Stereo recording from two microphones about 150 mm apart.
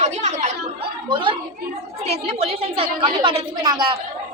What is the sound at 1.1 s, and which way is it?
Speech, 35° right (ahead or behind).